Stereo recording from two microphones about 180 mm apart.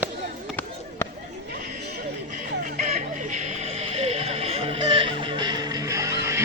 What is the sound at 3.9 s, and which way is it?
Music, 35° right (ahead or behind).